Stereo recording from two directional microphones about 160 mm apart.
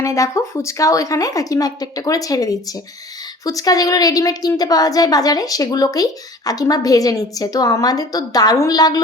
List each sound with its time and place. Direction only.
0.0 s a woman's voice: 20° left (ahead or behind)